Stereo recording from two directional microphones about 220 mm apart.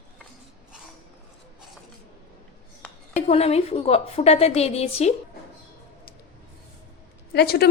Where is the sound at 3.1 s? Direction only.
30° left (ahead or behind).